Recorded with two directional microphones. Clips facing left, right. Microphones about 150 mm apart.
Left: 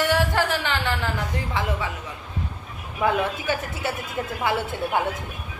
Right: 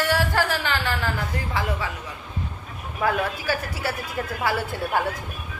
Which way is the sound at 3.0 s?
20° left (ahead or behind).